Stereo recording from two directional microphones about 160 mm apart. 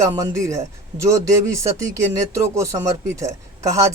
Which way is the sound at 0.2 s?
20° right (ahead or behind).